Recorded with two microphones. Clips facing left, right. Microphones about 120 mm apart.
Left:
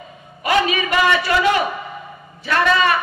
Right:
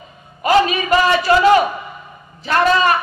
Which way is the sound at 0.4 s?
35° right (ahead or behind).